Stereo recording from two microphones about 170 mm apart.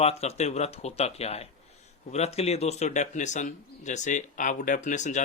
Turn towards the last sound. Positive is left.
turn(degrees=45)  # may be behind; listen again after turning